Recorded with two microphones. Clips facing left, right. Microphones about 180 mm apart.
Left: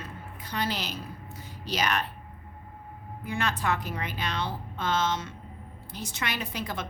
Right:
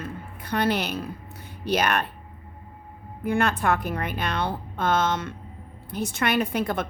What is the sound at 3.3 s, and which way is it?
A woman's voice, 55° right (ahead or behind).